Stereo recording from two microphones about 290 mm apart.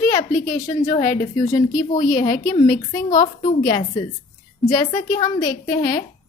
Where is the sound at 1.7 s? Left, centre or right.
Left.